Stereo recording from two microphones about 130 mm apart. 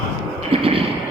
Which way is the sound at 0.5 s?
45° right (ahead or behind).